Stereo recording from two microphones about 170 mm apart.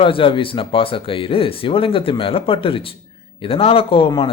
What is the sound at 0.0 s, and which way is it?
Speech, 30° left (ahead or behind).